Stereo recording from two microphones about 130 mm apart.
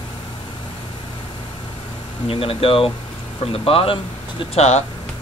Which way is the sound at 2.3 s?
45° left (ahead or behind).